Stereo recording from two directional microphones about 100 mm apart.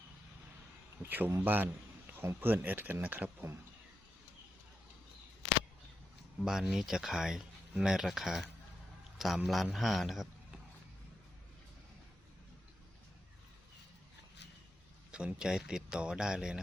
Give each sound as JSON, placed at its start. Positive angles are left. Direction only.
{"t": 1.0, "sound": "speech", "side_deg": -20}
{"t": 6.4, "sound": "a man's voice", "side_deg": -5}
{"t": 15.1, "sound": "speech", "side_deg": -10}